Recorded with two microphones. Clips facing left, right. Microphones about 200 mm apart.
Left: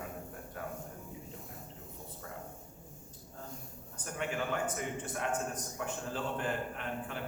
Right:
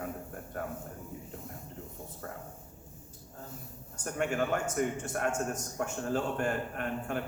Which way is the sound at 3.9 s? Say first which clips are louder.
Right 5 dB; 45° right (ahead or behind).